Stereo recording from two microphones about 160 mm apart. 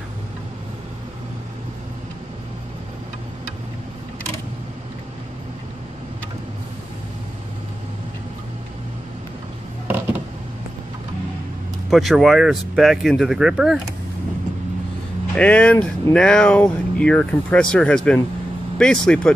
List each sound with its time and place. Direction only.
11.9 s speech: centre (ahead or behind)
15.3 s speech: 5° left (ahead or behind)